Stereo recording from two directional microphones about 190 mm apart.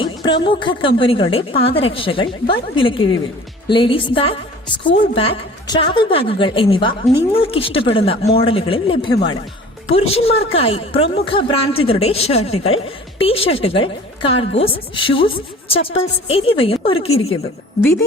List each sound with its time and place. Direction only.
0.0 s a woman's voice: 25° left (ahead or behind)